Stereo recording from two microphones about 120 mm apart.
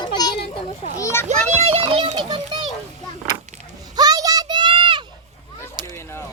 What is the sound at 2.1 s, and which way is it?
Children playing, 40° right (ahead or behind).